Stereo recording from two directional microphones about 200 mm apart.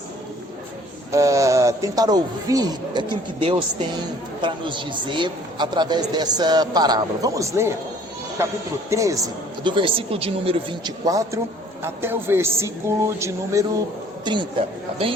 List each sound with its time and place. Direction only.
1.1 s a man's voice: 15° right (ahead or behind)
8.9 s a man's voice: 15° right (ahead or behind)